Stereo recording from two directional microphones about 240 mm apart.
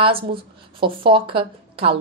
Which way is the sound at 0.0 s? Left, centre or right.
Right.